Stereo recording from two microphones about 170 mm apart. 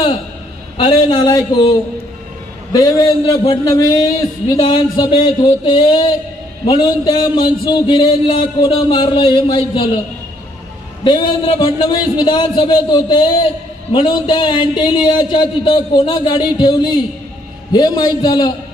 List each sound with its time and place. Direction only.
0.7 s a man's voice: 30° left (ahead or behind)
11.1 s a man's voice: 30° left (ahead or behind)